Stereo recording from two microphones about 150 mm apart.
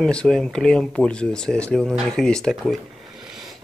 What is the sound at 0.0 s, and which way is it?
Speech, 5° left (ahead or behind).